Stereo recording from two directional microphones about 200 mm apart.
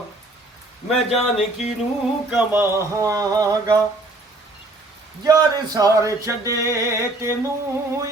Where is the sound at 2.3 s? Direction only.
10° right (ahead or behind).